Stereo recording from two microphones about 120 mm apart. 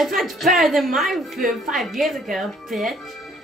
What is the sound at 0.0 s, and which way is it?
Speech, centre (ahead or behind).